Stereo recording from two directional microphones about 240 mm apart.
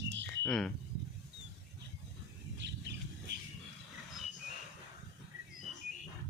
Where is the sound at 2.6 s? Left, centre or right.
Right.